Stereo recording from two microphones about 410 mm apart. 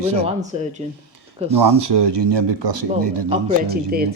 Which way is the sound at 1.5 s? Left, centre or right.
Right.